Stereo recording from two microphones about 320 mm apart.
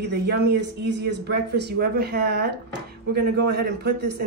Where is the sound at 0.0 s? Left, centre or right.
Right.